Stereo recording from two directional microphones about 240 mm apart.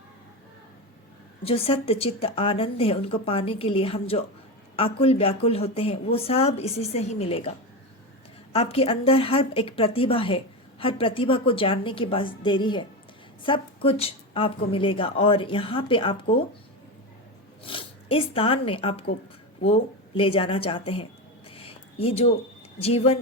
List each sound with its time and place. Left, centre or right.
1.5 s a woman's voice: left
8.5 s a woman's voice: left
13.8 s a woman's voice: left
17.7 s a woman's voice: left